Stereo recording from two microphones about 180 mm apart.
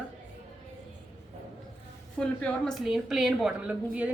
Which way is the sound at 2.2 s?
5° left (ahead or behind).